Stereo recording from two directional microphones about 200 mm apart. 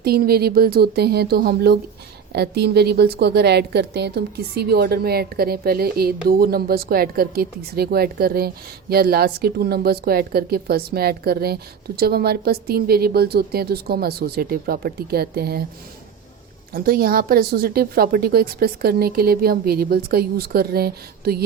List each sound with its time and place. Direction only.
0.0 s a woman's voice: 50° right (ahead or behind)
16.7 s a woman's voice: 50° right (ahead or behind)